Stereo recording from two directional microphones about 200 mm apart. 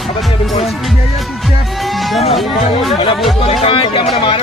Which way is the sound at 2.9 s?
25° left (ahead or behind).